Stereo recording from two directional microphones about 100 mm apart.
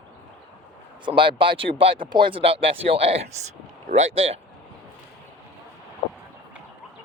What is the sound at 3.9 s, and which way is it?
Speech, 80° right.